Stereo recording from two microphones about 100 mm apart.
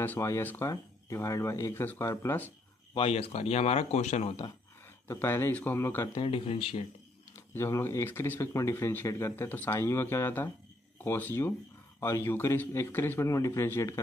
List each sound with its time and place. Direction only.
0.2 s speech: 25° left (ahead or behind)
2.9 s speech: 70° left (ahead or behind); by 4.5 s 90° left
5.0 s speech: 25° left (ahead or behind)
6.2 s speech: 70° left (ahead or behind)
7.3 s speech: 30° left (ahead or behind)
9.3 s speech: 15° left (ahead or behind)